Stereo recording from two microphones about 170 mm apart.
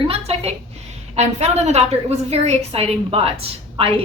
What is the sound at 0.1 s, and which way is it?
A woman's voice, 35° right (ahead or behind).